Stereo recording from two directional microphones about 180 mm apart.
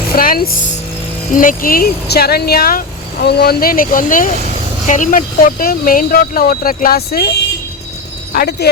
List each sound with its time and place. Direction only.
0.1 s speech: 55° left (ahead or behind)
8.3 s speech: 60° left (ahead or behind)